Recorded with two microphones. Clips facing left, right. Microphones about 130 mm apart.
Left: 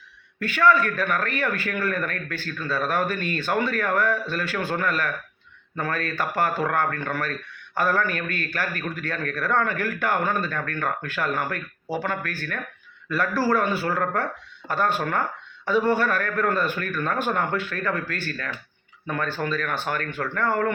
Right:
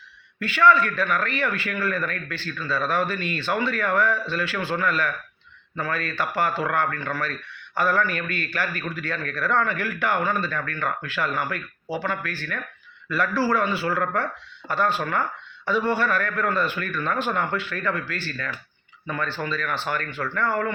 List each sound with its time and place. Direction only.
0.3 s a man's voice: 50° left (ahead or behind)